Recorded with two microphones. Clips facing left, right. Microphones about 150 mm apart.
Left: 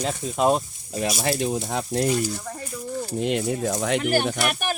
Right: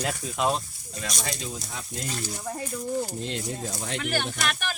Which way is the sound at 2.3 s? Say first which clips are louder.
Even; 10° right (ahead or behind).